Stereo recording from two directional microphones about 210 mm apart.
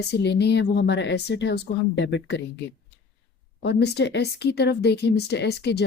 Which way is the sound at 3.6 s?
50° left (ahead or behind).